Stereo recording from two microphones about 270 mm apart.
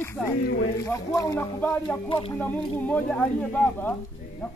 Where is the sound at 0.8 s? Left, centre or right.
Centre.